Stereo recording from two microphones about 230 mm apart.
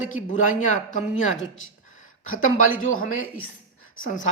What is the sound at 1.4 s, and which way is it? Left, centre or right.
Speech, left.